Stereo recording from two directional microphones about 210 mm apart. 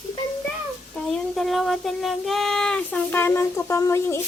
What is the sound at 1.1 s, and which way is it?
Speech, centre (ahead or behind).